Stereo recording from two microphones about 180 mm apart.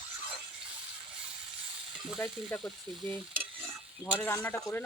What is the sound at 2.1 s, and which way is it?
Speech, 10° left (ahead or behind).